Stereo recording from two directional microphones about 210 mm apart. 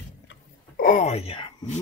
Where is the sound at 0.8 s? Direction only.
40° left (ahead or behind).